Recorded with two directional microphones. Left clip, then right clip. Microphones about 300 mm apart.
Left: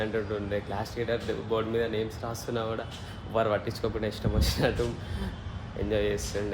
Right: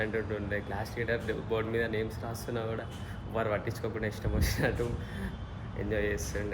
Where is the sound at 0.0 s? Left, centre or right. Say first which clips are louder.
Left 3 dB; centre.